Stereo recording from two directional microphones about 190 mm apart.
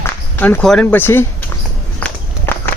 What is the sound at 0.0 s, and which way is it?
Speech, 10° left (ahead or behind).